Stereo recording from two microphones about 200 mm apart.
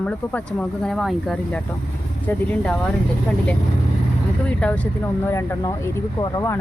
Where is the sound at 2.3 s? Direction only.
10° left (ahead or behind).